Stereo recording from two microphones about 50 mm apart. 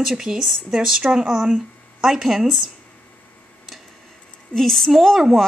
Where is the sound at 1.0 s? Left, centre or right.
Centre.